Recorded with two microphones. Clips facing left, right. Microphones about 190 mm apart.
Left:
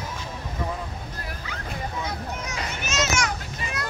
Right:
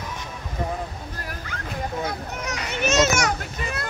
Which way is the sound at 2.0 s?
65° right (ahead or behind).